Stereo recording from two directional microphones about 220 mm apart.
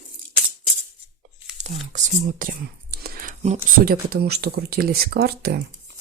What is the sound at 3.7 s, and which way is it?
Speech, 45° right (ahead or behind).